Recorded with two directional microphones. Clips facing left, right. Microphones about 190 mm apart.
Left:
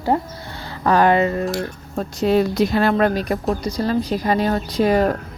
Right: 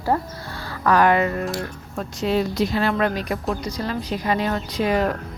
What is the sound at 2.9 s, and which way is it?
Speech, 40° left (ahead or behind).